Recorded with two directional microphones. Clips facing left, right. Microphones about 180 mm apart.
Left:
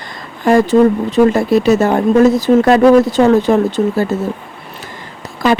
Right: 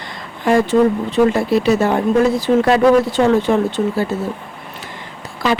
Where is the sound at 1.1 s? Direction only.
40° left (ahead or behind).